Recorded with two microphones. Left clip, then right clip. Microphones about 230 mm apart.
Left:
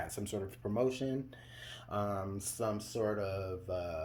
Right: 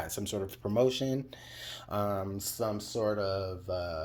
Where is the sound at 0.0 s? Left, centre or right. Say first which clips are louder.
Right 4 dB; right.